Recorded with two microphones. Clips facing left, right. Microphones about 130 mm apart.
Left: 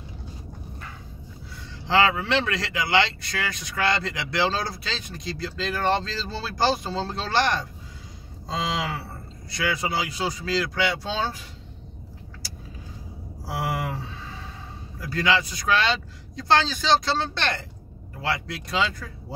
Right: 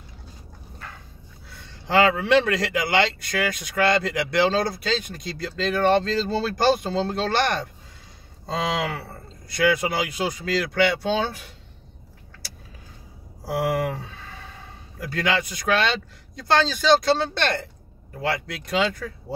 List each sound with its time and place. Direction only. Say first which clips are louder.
1.5 s speech: right 1 dB; 55° right (ahead or behind)
14.0 s a sound: left 3 dB; 55° right (ahead or behind)
15.0 s speech: left 1 dB; 55° right (ahead or behind)